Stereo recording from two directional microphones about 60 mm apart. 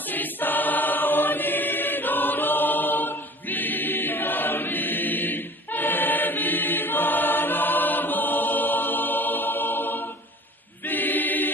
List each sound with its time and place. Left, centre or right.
0.1 s choir: left